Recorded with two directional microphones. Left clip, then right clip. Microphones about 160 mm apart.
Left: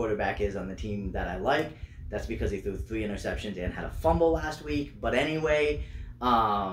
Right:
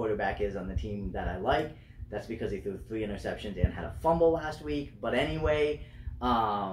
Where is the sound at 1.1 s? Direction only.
15° left (ahead or behind).